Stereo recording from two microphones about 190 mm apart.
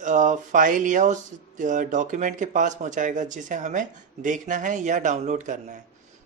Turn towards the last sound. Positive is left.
turn(degrees=-40)  # may be behind; listen again after turning